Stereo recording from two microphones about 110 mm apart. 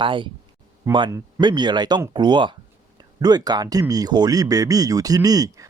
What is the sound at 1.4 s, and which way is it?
Speech, 45° right (ahead or behind).